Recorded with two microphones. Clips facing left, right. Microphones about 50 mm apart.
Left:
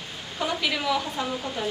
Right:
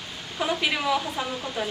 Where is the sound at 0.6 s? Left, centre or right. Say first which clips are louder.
Even; centre.